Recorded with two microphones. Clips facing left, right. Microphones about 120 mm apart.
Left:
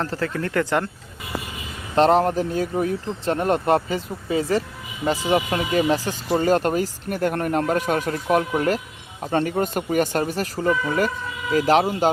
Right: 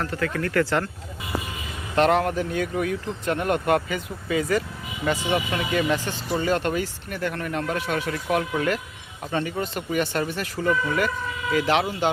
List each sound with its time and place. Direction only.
0.0 s speech: 30° left (ahead or behind)
2.0 s speech: 35° left (ahead or behind)